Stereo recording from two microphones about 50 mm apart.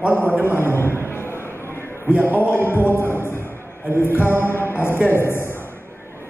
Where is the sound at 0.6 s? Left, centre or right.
Left.